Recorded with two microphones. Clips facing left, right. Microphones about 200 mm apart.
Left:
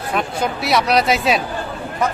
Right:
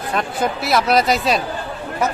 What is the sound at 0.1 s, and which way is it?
Speech, centre (ahead or behind).